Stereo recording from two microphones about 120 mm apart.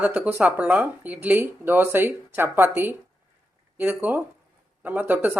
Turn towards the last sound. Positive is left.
turn(degrees=-15)  # may be behind; listen again after turning